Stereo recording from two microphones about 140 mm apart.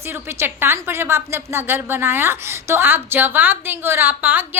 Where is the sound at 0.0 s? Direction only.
15° right (ahead or behind).